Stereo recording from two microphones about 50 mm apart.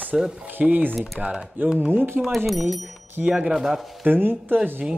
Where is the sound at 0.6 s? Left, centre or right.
Right.